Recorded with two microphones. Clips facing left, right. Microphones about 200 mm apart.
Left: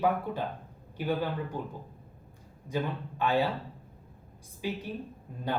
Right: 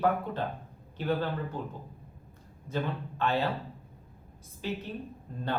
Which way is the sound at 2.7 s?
10° left (ahead or behind).